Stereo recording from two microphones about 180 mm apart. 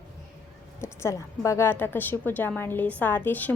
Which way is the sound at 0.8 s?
15° left (ahead or behind).